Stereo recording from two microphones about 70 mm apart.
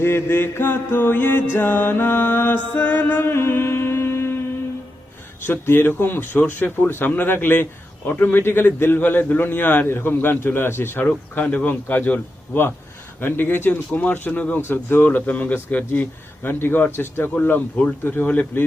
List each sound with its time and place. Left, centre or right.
0.0 s mantra: left
1.5 s speech: left
2.7 s music: left
5.4 s speech: left